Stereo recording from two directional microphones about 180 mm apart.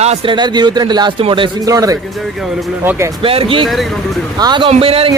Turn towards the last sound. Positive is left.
turn(degrees=-30)  # may be behind; listen again after turning